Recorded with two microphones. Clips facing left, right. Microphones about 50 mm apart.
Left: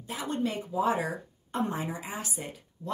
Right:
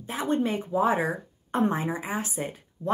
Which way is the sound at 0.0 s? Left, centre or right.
Right.